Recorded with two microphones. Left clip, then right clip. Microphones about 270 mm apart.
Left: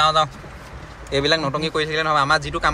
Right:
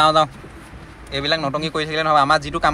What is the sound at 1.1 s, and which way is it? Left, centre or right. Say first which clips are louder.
A man's voice: left 1 dB; centre.